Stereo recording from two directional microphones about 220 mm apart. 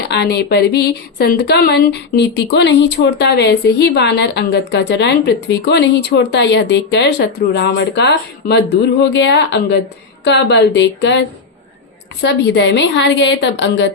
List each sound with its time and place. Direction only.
0.1 s a woman's voice: 50° left (ahead or behind)